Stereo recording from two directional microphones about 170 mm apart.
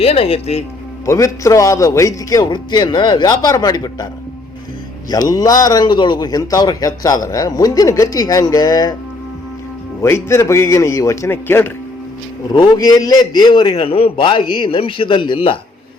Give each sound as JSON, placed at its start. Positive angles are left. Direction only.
{"t": 0.0, "sound": "speech", "side_deg": 35}
{"t": 1.0, "sound": "a man's voice", "side_deg": 20}
{"t": 5.0, "sound": "a man's voice", "side_deg": 20}
{"t": 10.0, "sound": "a man's voice", "side_deg": 15}
{"t": 12.5, "sound": "a man's voice", "side_deg": 25}